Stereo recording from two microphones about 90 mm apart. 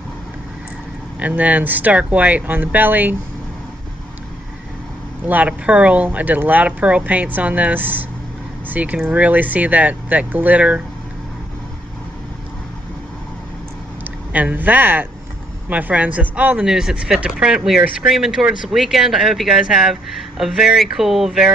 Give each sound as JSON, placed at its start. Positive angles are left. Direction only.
{"t": 1.2, "sound": "speech", "side_deg": -15}
{"t": 5.2, "sound": "speech", "side_deg": -15}
{"t": 14.3, "sound": "speech", "side_deg": -15}
{"t": 16.6, "sound": "speech", "side_deg": -5}